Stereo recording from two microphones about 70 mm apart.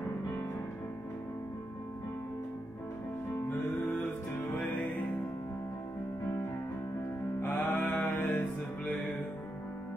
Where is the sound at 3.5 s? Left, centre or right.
Left.